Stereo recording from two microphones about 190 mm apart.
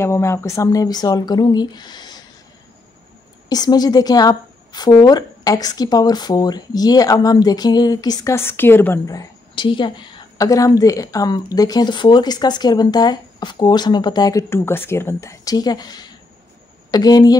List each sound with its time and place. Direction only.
0.0 s a woman's voice: 15° left (ahead or behind)
3.4 s a woman's voice: 20° left (ahead or behind)